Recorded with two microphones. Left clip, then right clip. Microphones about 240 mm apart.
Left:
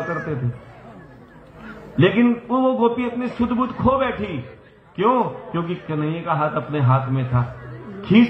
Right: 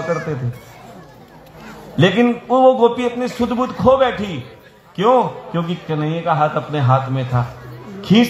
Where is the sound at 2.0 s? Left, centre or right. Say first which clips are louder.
Right 3 dB; right.